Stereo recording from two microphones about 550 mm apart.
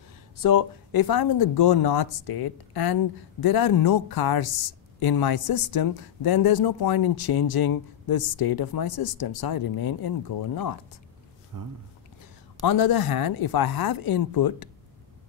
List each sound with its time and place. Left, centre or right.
0.4 s speech: left
11.5 s speech: right
12.6 s speech: left